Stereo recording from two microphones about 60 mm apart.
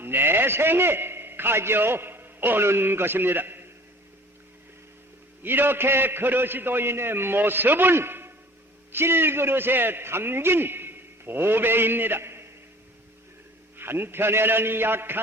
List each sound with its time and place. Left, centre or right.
0.0 s a man's voice: right
5.4 s a man's voice: right
13.7 s a man's voice: right